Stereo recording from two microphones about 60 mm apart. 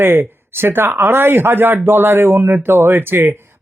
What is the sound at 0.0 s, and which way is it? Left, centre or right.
Speech, right.